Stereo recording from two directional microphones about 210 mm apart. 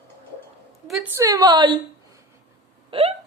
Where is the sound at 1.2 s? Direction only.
15° right (ahead or behind).